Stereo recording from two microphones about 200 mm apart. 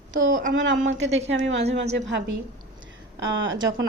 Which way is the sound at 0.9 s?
35° right (ahead or behind).